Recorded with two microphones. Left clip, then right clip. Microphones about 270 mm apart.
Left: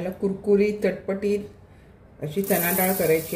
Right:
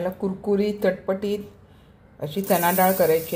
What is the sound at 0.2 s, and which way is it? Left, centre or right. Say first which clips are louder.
Speech: left 6 dB; right.